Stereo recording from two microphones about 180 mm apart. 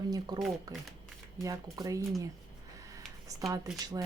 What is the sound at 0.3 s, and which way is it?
Speech, 20° right (ahead or behind).